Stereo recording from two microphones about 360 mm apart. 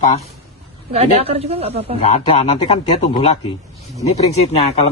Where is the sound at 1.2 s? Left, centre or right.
Centre.